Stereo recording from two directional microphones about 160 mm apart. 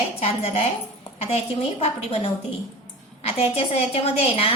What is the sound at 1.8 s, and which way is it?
A woman's voice, 40° left (ahead or behind).